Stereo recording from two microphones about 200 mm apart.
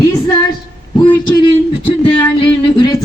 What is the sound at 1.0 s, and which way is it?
Speech, 25° left (ahead or behind).